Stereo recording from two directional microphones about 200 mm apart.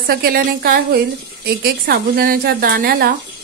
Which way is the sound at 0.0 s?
50° right (ahead or behind).